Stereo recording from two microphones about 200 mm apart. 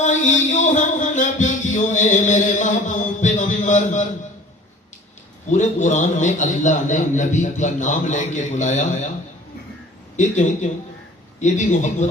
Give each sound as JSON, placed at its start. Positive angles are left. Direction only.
{"t": 0.0, "sound": "music", "side_deg": 40}
{"t": 5.5, "sound": "a man's voice", "side_deg": 35}
{"t": 10.2, "sound": "a man's voice", "side_deg": 35}